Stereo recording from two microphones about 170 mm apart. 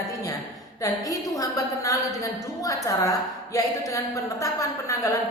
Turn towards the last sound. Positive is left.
turn(degrees=20)  # may be behind; listen again after turning